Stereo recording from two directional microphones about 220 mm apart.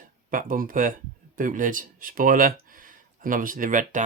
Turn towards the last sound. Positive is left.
turn(degrees=-35)  # may be behind; listen again after turning